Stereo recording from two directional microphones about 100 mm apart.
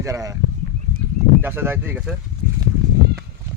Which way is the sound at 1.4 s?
20° right (ahead or behind).